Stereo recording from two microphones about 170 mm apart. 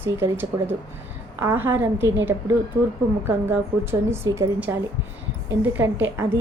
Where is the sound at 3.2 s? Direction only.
15° right (ahead or behind).